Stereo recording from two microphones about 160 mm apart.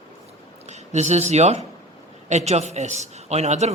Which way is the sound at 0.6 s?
45° right (ahead or behind).